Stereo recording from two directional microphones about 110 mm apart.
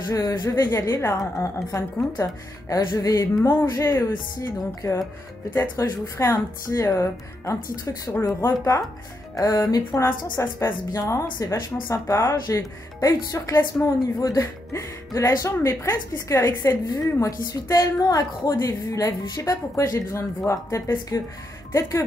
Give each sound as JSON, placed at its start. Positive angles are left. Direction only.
{"t": 0.1, "sound": "speech", "side_deg": 35}
{"t": 2.7, "sound": "music", "side_deg": 30}
{"t": 3.4, "sound": "speech", "side_deg": 25}
{"t": 9.4, "sound": "music", "side_deg": 30}
{"t": 10.0, "sound": "speech", "side_deg": 20}